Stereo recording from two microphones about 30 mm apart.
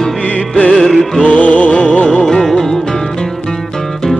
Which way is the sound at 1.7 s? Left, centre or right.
Left.